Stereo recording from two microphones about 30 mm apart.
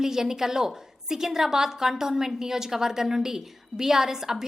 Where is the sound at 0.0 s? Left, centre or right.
Centre.